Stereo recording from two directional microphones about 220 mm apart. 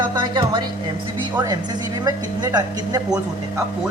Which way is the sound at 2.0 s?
20° right (ahead or behind).